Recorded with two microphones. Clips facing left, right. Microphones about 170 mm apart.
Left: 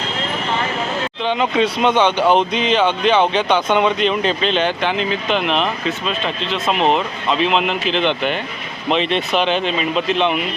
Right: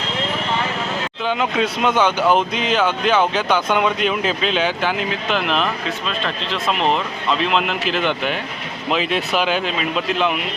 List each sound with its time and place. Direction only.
1.2 s speech: 5° right (ahead or behind)
2.1 s speech: 30° left (ahead or behind)
2.5 s speech: 5° right (ahead or behind)